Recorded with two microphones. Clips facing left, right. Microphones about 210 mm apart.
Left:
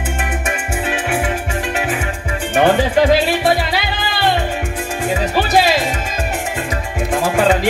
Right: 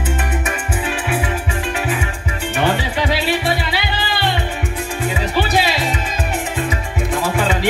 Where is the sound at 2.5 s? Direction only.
45° left (ahead or behind).